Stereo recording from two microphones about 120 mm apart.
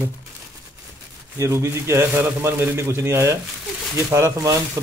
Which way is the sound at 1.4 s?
25° right (ahead or behind).